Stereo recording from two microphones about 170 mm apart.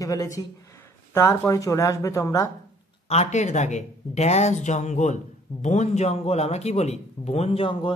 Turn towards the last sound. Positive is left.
turn(degrees=30)  # may be behind; listen again after turning